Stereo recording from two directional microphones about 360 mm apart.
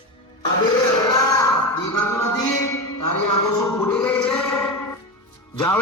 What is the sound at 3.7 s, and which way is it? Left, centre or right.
Music, centre.